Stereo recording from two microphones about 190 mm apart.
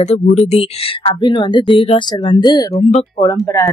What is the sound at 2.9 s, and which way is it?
Speech, 35° left (ahead or behind).